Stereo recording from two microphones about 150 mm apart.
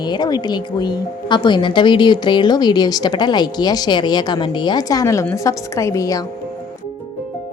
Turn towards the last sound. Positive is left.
turn(degrees=25)  # may be behind; listen again after turning